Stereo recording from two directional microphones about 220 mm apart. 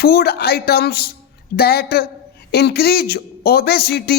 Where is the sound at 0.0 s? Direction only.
45° left (ahead or behind).